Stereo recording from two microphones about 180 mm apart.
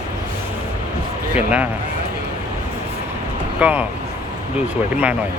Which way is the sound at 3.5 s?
10° right (ahead or behind).